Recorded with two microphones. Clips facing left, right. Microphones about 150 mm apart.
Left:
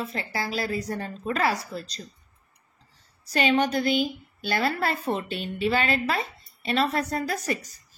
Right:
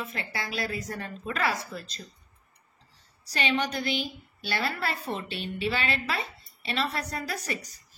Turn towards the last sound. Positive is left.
turn(degrees=45)  # may be behind; listen again after turning